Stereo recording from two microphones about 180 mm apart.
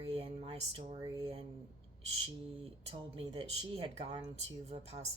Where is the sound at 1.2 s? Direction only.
30° right (ahead or behind).